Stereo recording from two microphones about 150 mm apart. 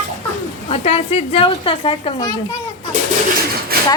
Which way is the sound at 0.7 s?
40° left (ahead or behind).